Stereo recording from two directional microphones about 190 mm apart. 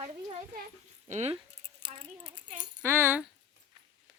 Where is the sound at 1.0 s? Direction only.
35° right (ahead or behind).